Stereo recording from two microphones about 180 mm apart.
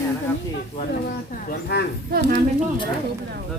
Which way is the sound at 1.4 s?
65° left (ahead or behind).